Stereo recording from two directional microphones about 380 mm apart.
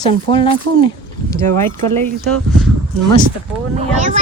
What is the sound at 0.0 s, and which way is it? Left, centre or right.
Speech, centre.